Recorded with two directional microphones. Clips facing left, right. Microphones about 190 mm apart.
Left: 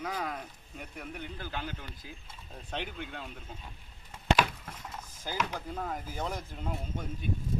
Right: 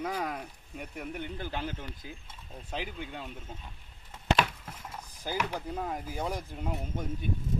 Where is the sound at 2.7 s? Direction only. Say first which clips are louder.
Right 1 dB; 5° right (ahead or behind).